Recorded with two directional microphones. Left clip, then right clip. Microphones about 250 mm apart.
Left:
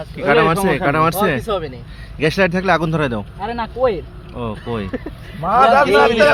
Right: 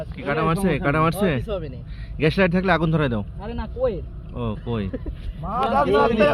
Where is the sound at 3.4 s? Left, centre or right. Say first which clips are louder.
Left 8 dB; left.